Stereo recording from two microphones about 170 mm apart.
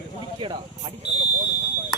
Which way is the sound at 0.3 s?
30° right (ahead or behind).